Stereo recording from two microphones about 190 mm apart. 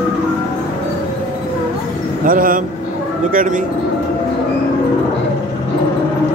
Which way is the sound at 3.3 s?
45° right (ahead or behind).